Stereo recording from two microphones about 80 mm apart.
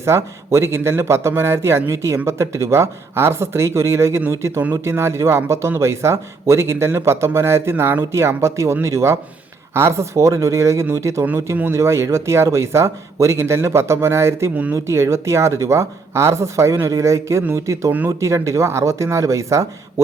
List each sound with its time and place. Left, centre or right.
0.0 s speech: right